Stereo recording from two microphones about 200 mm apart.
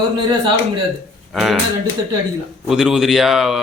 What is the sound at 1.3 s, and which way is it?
Speech, centre (ahead or behind).